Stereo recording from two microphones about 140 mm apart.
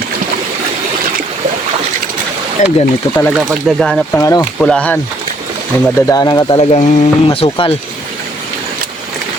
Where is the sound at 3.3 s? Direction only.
5° right (ahead or behind).